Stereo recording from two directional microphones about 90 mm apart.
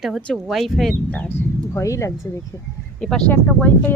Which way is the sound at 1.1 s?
20° left (ahead or behind).